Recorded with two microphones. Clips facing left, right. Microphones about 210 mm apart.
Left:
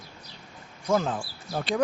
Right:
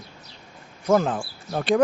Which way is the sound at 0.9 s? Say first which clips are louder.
Right 5 dB; 55° right (ahead or behind).